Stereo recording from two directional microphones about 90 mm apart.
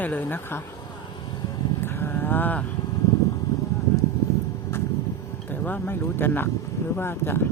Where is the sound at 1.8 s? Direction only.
25° left (ahead or behind).